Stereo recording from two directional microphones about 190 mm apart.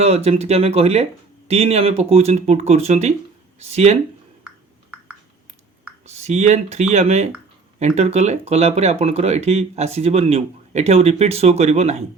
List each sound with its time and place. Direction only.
0.0 s speech: 35° right (ahead or behind)
6.1 s speech: 35° right (ahead or behind)